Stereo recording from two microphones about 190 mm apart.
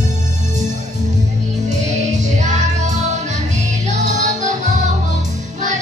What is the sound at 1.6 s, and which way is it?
Music, 40° right (ahead or behind).